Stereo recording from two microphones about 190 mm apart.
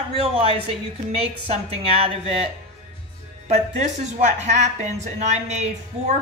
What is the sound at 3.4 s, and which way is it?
A woman's voice, 35° right (ahead or behind).